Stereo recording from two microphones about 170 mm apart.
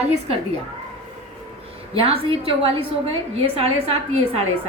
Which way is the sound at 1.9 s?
35° right (ahead or behind).